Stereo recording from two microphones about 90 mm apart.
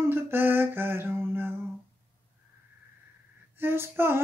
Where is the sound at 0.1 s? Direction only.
25° right (ahead or behind).